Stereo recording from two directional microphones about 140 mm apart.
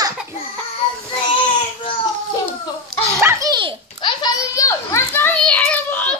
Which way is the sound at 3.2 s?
20° right (ahead or behind).